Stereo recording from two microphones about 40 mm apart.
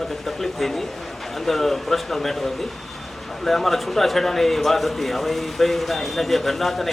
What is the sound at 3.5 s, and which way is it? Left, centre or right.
A man's voice, centre.